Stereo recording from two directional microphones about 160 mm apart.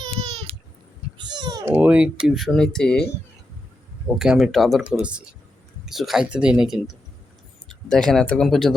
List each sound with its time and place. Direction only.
1.2 s typing: 25° right (ahead or behind)
1.7 s speech: 10° right (ahead or behind)
4.2 s speech: 5° right (ahead or behind)